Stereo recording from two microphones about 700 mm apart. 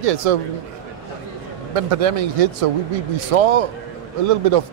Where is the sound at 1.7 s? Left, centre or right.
Right.